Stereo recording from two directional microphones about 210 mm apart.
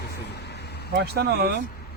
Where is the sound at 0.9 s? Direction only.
50° right (ahead or behind).